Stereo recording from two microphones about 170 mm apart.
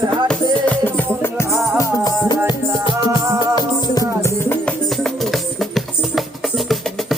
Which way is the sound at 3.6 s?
25° left (ahead or behind).